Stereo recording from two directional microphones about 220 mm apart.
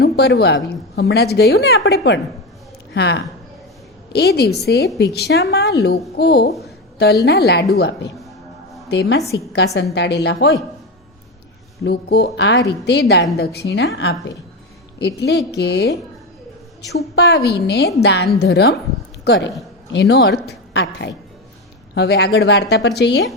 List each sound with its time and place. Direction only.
0.0 s a woman's voice: 50° left (ahead or behind)
11.8 s a woman's voice: 50° left (ahead or behind)
17.2 s a woman's voice: 50° left (ahead or behind)